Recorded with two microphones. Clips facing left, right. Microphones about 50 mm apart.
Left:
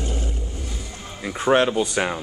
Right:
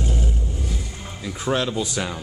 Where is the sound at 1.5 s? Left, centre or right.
Left.